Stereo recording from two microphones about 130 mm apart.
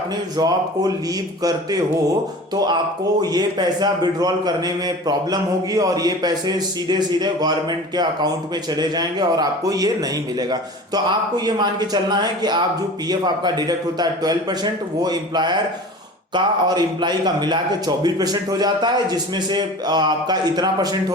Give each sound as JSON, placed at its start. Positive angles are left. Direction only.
{"t": 0.3, "sound": "speech", "side_deg": -30}
{"t": 3.2, "sound": "a man's voice", "side_deg": -30}
{"t": 8.7, "sound": "a man's voice", "side_deg": -30}